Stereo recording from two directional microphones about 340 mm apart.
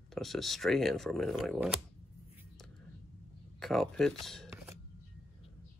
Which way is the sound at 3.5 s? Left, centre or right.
Centre.